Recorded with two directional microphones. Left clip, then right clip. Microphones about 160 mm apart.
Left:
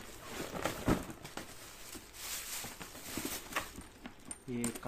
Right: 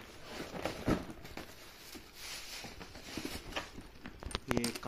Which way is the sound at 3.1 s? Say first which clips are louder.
Left 2 dB; 20° left (ahead or behind).